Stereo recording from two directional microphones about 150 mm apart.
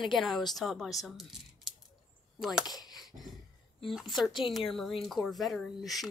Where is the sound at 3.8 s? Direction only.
Centre (ahead or behind).